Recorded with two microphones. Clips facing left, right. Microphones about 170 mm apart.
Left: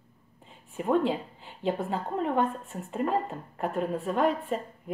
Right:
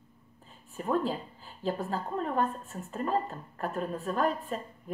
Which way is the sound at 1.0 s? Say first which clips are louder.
Left 4 dB; 75° left (ahead or behind).